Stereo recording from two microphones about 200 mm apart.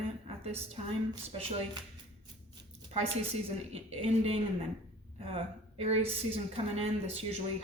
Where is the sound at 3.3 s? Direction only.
30° right (ahead or behind).